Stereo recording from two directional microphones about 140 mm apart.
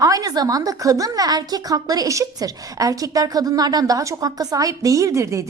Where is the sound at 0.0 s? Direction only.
25° right (ahead or behind).